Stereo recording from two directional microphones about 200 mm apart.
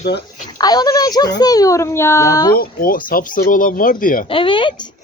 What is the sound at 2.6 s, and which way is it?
Speech, 45° left (ahead or behind).